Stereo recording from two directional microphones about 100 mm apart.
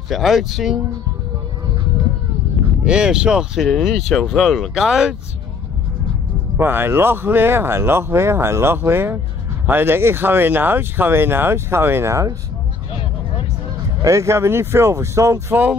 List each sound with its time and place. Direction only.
0.1 s speech: centre (ahead or behind)
2.8 s speech: 10° right (ahead or behind)
6.5 s speech: 20° right (ahead or behind)
14.0 s speech: 30° right (ahead or behind)